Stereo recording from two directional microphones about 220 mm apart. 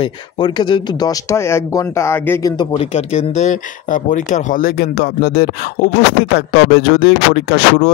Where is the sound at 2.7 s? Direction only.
30° left (ahead or behind).